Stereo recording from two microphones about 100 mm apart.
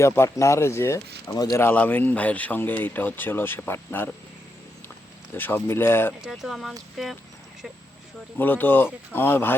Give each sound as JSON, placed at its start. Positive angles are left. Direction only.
{"t": 0.0, "sound": "speech", "side_deg": 30}
{"t": 1.7, "sound": "speech", "side_deg": 15}
{"t": 5.3, "sound": "speech", "side_deg": 20}
{"t": 6.2, "sound": "speech", "side_deg": 0}
{"t": 8.4, "sound": "speech", "side_deg": 20}